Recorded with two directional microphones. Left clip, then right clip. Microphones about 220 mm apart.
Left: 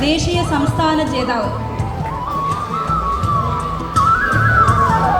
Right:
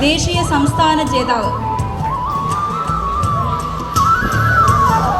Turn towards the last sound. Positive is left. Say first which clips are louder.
# even
turn(degrees=-45)  # may be behind; listen again after turning